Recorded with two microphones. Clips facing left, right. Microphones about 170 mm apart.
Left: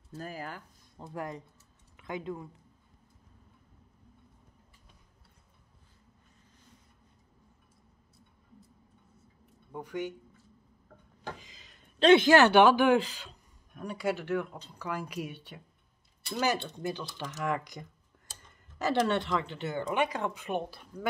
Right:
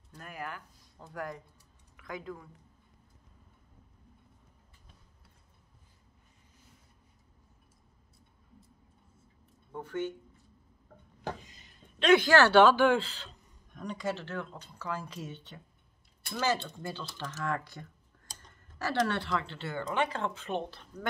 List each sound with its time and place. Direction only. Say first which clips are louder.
0.2 s speech: left 1 dB; 30° left (ahead or behind)
9.7 s speech: right 1 dB; 15° left (ahead or behind)
11.3 s a sound: right 2 dB; 90° left
12.0 s speech: left 3 dB; 25° left (ahead or behind)